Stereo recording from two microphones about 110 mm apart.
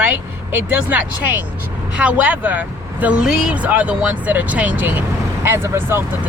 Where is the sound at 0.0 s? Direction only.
15° right (ahead or behind).